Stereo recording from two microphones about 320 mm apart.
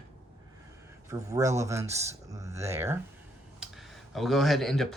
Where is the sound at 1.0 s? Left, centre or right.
Centre.